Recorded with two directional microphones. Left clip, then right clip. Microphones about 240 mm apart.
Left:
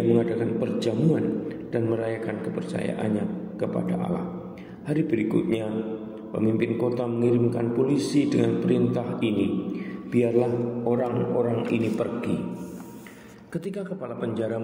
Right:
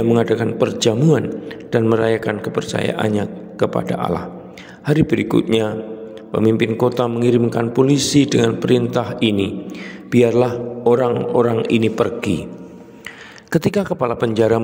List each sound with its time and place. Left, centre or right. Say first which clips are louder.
0.1 s a man's voice: right 7 dB; right
13.5 s a man's voice: right 14 dB; right